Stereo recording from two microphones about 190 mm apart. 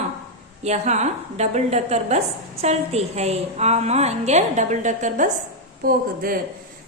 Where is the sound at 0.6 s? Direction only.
35° right (ahead or behind).